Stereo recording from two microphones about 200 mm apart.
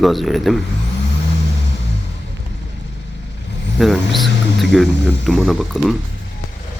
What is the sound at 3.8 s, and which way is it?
Speech, centre (ahead or behind).